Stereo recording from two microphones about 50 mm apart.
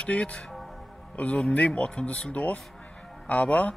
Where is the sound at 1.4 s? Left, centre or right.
Left.